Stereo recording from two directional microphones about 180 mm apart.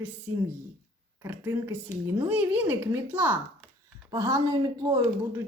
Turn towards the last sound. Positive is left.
turn(degrees=-20)  # may be behind; listen again after turning